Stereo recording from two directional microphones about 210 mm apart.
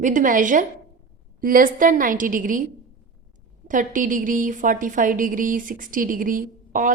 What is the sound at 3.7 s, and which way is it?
A woman's voice, 40° right (ahead or behind).